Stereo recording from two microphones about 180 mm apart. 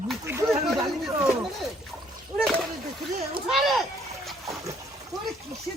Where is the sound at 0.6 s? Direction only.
Centre (ahead or behind).